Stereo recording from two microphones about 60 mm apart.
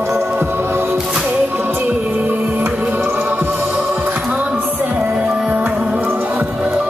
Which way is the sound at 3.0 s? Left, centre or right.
Right.